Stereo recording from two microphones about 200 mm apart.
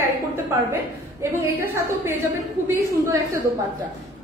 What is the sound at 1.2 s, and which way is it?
Speech, 10° right (ahead or behind).